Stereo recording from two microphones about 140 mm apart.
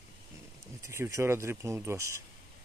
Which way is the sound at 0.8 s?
20° right (ahead or behind).